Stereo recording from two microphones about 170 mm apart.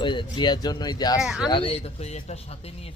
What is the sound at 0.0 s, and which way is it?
Speech, 30° left (ahead or behind).